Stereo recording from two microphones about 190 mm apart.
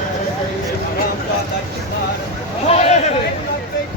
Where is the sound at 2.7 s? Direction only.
35° left (ahead or behind).